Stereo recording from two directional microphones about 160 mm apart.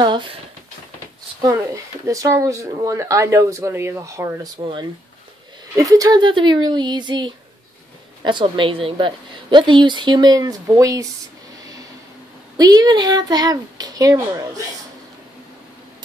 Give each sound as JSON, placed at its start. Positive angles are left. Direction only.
{"t": 0.0, "sound": "speech", "side_deg": -30}
{"t": 1.4, "sound": "speech", "side_deg": -20}
{"t": 4.6, "sound": "speech", "side_deg": -30}
{"t": 12.5, "sound": "speech", "side_deg": -25}